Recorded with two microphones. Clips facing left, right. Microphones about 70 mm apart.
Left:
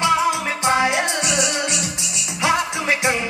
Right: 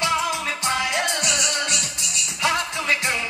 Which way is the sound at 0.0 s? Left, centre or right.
Left.